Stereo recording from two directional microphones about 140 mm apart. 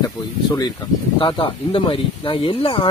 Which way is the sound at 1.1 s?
40° left (ahead or behind).